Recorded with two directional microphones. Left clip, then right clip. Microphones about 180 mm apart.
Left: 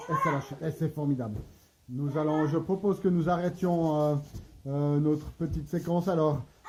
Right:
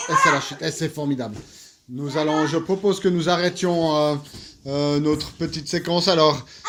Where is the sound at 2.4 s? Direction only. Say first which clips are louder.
Right 8 dB; 20° right (ahead or behind).